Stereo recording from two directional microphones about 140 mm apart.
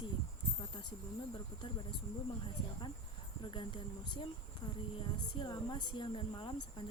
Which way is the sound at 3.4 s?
35° left (ahead or behind).